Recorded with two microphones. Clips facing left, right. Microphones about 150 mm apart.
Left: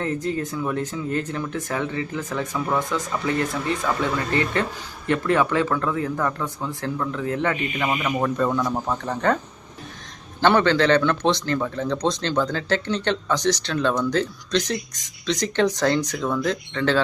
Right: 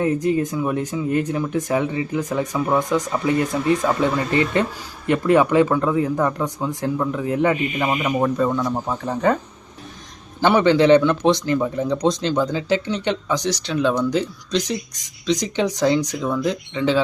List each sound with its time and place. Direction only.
0.0 s speech: 15° right (ahead or behind)
10.4 s speech: 15° right (ahead or behind)